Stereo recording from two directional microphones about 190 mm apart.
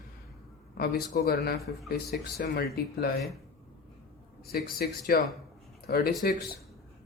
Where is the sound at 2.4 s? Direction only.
55° left (ahead or behind).